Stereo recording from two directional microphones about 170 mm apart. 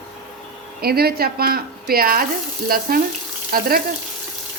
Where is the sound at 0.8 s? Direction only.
65° right (ahead or behind).